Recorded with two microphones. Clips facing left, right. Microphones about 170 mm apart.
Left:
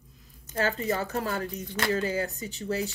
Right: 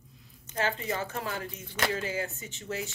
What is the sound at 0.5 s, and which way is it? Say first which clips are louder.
A woman's voice: left 3 dB; 40° left (ahead or behind).